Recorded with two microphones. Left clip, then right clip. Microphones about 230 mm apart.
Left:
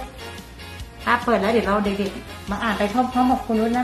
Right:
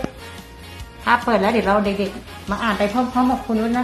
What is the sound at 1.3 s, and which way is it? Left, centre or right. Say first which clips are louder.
A woman's voice: right 2 dB; right.